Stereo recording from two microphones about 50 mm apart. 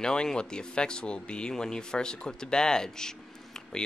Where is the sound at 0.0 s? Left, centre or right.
Centre.